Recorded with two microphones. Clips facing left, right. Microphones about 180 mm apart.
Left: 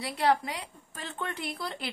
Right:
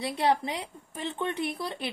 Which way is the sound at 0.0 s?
25° right (ahead or behind).